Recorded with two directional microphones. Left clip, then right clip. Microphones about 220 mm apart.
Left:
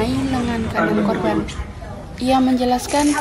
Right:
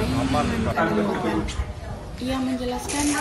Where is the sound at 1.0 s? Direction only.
45° left (ahead or behind).